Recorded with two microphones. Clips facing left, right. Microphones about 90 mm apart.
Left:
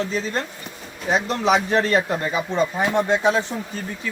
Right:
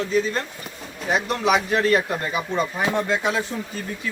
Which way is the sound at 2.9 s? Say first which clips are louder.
Left 5 dB; 20° left (ahead or behind).